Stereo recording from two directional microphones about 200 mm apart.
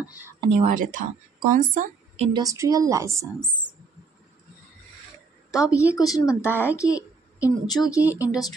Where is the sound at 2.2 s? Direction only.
20° right (ahead or behind).